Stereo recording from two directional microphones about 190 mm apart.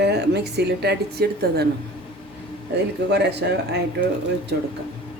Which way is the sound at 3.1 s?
60° right (ahead or behind).